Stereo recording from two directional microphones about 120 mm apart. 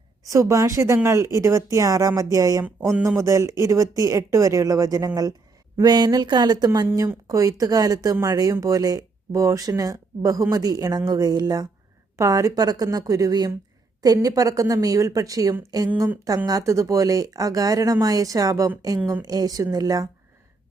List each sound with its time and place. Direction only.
0.3 s speech: 25° right (ahead or behind)